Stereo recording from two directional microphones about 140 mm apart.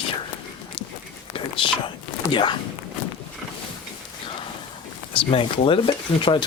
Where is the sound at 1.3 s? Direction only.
40° left (ahead or behind).